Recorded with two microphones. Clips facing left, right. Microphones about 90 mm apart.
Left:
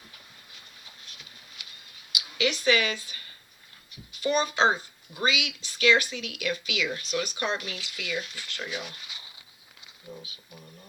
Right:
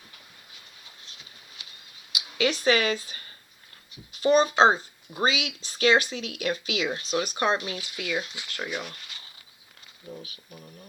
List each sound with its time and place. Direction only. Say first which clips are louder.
1.6 s mouse: left 1 dB; 30° right (ahead or behind)
2.1 s a woman's voice: right 2 dB; 35° right (ahead or behind)
8.4 s speech: right 1 dB; 20° right (ahead or behind)
8.8 s a sound: right 2 dB; 10° left (ahead or behind)